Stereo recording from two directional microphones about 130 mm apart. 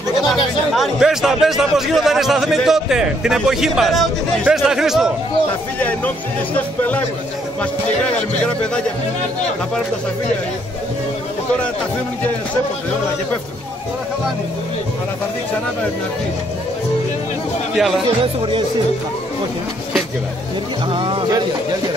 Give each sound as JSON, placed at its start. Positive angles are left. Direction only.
{"t": 0.3, "sound": "speech", "side_deg": 0}
{"t": 5.8, "sound": "speech", "side_deg": 10}
{"t": 17.7, "sound": "speech", "side_deg": 0}
{"t": 18.2, "sound": "speech", "side_deg": -40}
{"t": 20.9, "sound": "speech", "side_deg": -40}